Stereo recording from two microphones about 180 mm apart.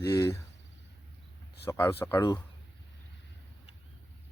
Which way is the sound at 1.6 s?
15° left (ahead or behind).